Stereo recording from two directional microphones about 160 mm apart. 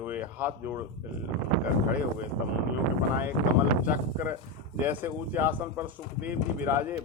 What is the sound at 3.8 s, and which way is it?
Speech, 15° right (ahead or behind).